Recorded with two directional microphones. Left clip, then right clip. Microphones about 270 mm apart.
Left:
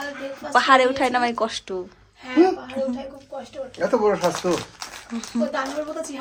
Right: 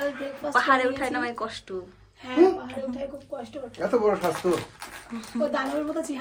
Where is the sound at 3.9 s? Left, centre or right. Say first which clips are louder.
Left 3 dB; left.